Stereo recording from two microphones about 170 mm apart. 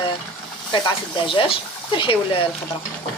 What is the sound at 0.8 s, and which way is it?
Speech, 30° left (ahead or behind).